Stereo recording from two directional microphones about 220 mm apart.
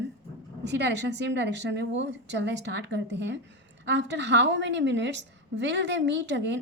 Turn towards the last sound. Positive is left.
turn(degrees=-55)  # may be behind; listen again after turning